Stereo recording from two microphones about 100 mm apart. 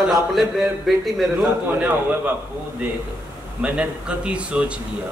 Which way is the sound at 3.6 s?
10° right (ahead or behind).